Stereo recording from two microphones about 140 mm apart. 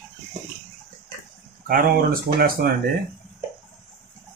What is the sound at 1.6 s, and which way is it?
Speech, 90° right.